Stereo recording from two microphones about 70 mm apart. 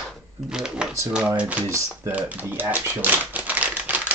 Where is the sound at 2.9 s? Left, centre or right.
Right.